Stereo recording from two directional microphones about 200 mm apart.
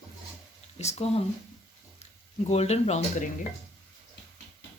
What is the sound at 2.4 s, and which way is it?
Speech, 30° left (ahead or behind).